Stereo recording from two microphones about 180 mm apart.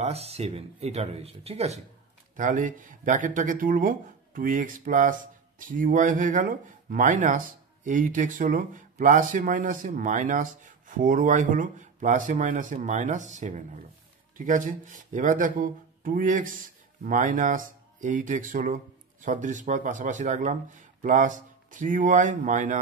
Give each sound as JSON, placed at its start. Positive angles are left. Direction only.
{"t": 0.0, "sound": "speech", "side_deg": -35}
{"t": 2.3, "sound": "speech", "side_deg": -45}